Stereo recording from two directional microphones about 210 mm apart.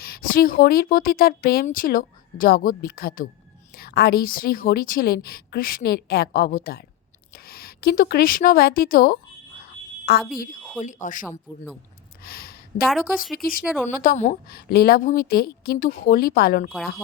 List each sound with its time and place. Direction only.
0.0 s a woman's voice: 45° left (ahead or behind)
10.6 s a sound: centre (ahead or behind)
10.8 s a woman's voice: 35° left (ahead or behind)
12.2 s a sound: 45° left (ahead or behind)
12.9 s a woman's voice: centre (ahead or behind)
14.0 s a woman's voice: 40° left (ahead or behind)